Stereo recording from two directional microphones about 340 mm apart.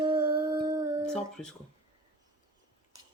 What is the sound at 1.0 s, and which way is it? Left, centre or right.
Speech, centre.